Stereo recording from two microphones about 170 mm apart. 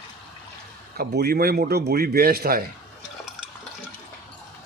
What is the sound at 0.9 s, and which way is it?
Speech, 65° right (ahead or behind).